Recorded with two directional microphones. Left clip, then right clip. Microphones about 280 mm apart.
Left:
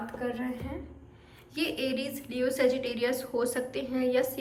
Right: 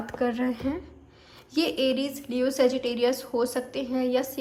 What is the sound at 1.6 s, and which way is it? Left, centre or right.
A woman's voice, centre.